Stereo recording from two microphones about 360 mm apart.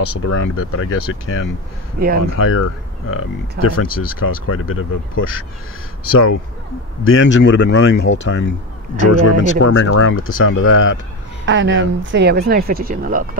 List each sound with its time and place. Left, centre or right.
0.0 s speech: left
2.0 s speech: right
2.3 s speech: left
3.8 s speech: left
4.5 s speech: left
11.4 s speech: right